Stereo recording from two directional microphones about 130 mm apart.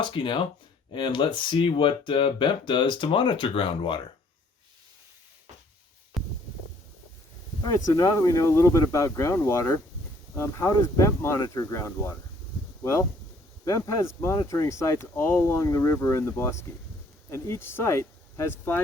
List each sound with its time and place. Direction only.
0.0 s speech: 40° left (ahead or behind)
6.2 s a sound: centre (ahead or behind)
7.6 s speech: 25° left (ahead or behind)